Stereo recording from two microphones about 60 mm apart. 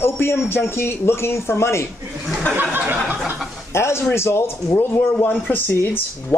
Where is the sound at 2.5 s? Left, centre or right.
Right.